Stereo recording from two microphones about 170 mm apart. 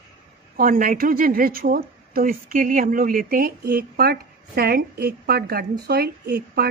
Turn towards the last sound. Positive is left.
turn(degrees=-70)  # may be behind; listen again after turning